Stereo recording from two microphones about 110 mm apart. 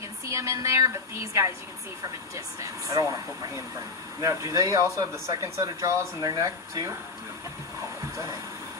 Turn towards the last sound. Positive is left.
turn(degrees=-30)  # may be behind; listen again after turning